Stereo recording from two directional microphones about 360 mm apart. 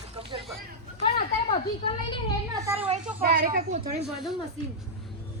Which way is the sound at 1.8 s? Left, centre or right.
Centre.